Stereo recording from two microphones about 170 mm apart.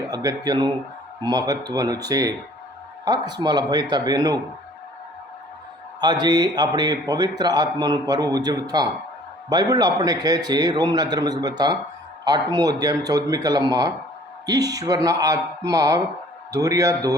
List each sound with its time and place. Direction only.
0.1 s speech: 20° right (ahead or behind)
6.0 s speech: 25° right (ahead or behind)